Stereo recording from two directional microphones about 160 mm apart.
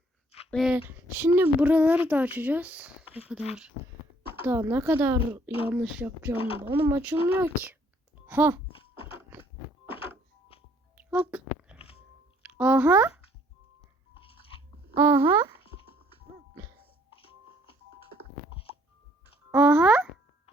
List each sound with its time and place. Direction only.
0.5 s speech: 5° right (ahead or behind)
4.4 s speech: 15° right (ahead or behind)
10.9 s a sound: 10° right (ahead or behind)
12.4 s speech: 10° right (ahead or behind)
14.9 s speech: 15° right (ahead or behind)
19.5 s speech: 10° right (ahead or behind)